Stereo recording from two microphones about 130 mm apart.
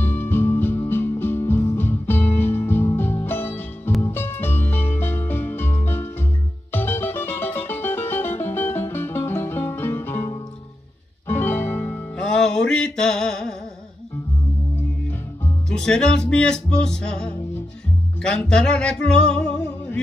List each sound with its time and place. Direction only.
0.0 s music: 15° left (ahead or behind)
12.2 s music: 5° left (ahead or behind)
15.7 s speech: 5° left (ahead or behind)
18.2 s music: 5° left (ahead or behind)